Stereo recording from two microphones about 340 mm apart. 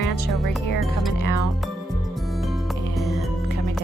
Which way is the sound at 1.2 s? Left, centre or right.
Left.